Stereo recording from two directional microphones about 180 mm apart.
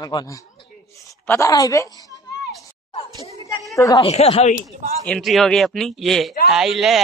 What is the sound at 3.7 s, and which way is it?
Speech, 15° left (ahead or behind).